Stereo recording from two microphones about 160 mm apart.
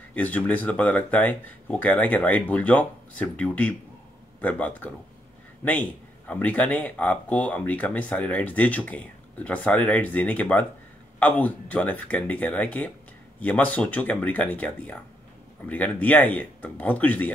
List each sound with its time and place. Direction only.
0.1 s speech: 10° left (ahead or behind)